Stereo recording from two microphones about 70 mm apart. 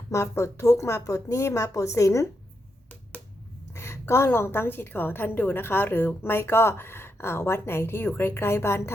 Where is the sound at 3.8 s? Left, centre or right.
Left.